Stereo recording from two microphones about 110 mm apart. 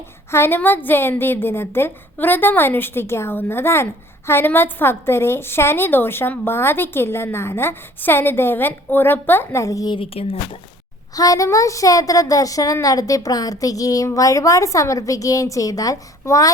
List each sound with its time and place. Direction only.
0.3 s a woman's voice: 20° left (ahead or behind)
9.9 s speech: 55° left (ahead or behind)
11.1 s a woman's voice: 35° left (ahead or behind)